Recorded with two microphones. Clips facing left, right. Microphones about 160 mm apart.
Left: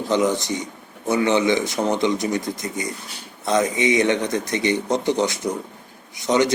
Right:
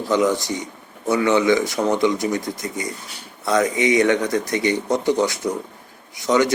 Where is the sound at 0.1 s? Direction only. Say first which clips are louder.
Right 1 dB; 20° left (ahead or behind).